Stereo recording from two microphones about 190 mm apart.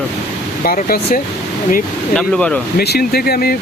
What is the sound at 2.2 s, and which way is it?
Speech, 5° left (ahead or behind).